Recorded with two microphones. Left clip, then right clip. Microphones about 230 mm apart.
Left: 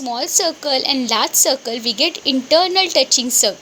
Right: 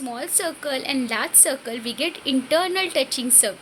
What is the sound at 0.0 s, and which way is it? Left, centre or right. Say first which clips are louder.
Child singing: left 8 dB; centre.